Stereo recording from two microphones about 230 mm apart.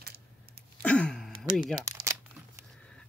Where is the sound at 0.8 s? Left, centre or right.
Centre.